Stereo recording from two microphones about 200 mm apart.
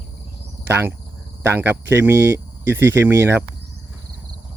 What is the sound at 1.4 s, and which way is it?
Speech, 10° right (ahead or behind).